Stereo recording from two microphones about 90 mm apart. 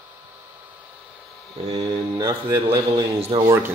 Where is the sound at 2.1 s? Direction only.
45° right (ahead or behind).